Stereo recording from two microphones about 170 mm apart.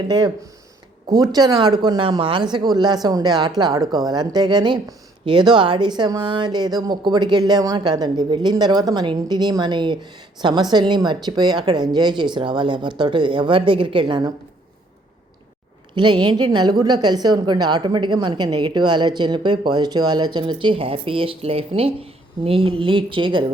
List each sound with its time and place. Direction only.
1.1 s speech: 25° right (ahead or behind)
16.0 s speech: 25° right (ahead or behind)